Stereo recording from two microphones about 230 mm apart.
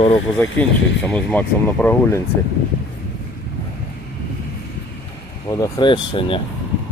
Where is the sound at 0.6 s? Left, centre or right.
Centre.